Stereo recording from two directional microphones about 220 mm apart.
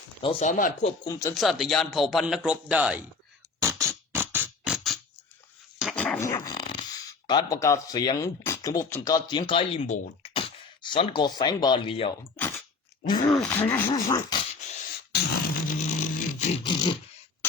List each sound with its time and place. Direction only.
0.2 s speech: 25° left (ahead or behind)
0.4 s speech: 35° left (ahead or behind)
1.0 s speech: 15° left (ahead or behind)
1.3 s speech: centre (ahead or behind)
3.6 s music: 15° right (ahead or behind)
5.8 s dog: centre (ahead or behind); by 6.8 s 20° left (ahead or behind)
7.3 s speech: 15° left (ahead or behind)
13.2 s speech: 5° left (ahead or behind)
15.1 s beatboxing: 40° left (ahead or behind)
16.6 s a sound: 20° left (ahead or behind)